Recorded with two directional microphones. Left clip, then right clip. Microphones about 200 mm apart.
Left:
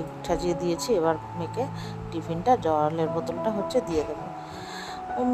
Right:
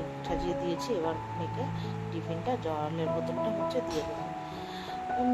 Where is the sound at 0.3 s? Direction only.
40° left (ahead or behind).